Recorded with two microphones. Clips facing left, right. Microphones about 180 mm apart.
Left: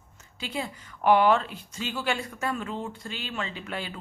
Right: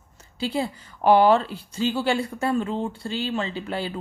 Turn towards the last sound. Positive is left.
turn(degrees=-30)  # may be behind; listen again after turning